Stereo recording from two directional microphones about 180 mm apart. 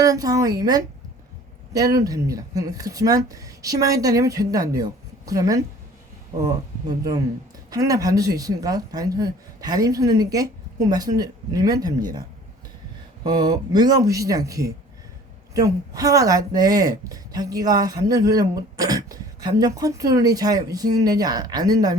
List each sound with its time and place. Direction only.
0.0 s a woman's voice: 20° right (ahead or behind)
13.2 s speech: 20° right (ahead or behind)